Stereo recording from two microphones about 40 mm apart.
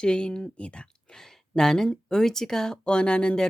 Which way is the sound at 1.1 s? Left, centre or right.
Centre.